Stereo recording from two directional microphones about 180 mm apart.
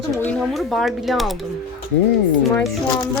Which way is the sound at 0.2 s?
5° left (ahead or behind).